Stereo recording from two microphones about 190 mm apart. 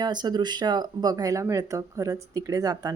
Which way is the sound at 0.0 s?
20° right (ahead or behind).